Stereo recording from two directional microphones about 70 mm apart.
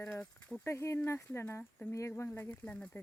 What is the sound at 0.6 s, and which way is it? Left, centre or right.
Speech, left.